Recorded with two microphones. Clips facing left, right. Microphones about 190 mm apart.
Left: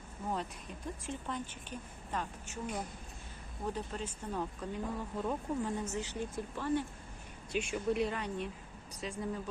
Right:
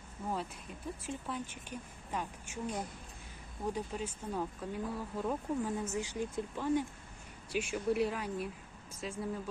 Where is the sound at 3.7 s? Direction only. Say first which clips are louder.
Right 2 dB; 10° right (ahead or behind).